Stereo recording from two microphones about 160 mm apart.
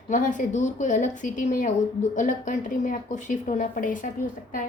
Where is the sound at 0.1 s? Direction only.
55° left (ahead or behind).